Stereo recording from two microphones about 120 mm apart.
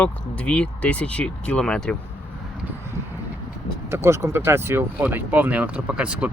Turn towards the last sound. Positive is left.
turn(degrees=-10)  # may be behind; listen again after turning